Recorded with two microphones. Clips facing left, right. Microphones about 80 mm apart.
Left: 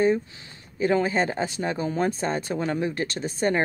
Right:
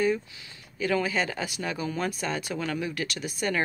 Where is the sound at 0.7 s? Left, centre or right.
Left.